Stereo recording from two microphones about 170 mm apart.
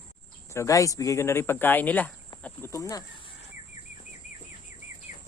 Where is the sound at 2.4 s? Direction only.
15° left (ahead or behind).